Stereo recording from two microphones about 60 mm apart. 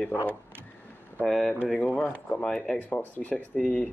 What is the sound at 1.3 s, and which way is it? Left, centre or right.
Speech, centre.